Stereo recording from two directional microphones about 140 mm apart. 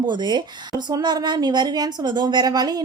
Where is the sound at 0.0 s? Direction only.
30° right (ahead or behind).